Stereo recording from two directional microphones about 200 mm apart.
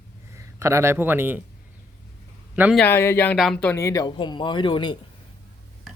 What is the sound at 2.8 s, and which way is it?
Speech, 10° left (ahead or behind).